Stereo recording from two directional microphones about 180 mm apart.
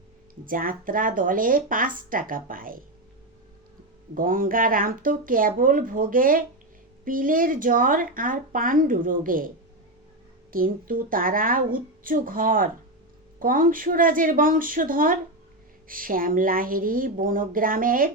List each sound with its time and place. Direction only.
0.4 s speech: 50° right (ahead or behind)
4.1 s speech: 50° right (ahead or behind)
10.5 s speech: 50° right (ahead or behind)